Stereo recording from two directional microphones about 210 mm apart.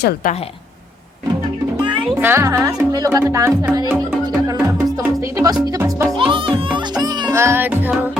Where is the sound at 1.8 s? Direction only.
25° right (ahead or behind).